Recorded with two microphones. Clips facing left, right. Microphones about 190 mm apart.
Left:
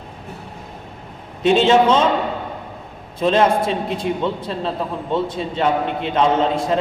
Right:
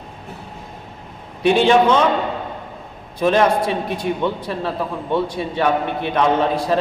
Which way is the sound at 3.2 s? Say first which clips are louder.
Even; 20° left (ahead or behind).